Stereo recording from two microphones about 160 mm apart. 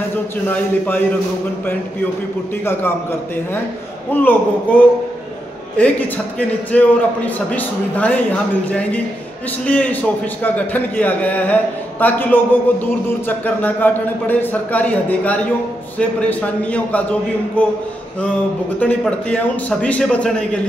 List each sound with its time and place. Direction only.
0.5 s speech: 10° left (ahead or behind)
2.6 s speech: 15° left (ahead or behind)
18.8 s speech: 10° left (ahead or behind)